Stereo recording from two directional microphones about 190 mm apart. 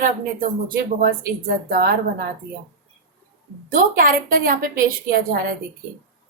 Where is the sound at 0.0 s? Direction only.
45° right (ahead or behind).